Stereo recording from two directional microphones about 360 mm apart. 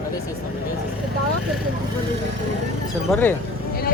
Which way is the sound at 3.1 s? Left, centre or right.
Centre.